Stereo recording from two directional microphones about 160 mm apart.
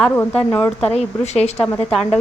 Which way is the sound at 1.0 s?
40° left (ahead or behind).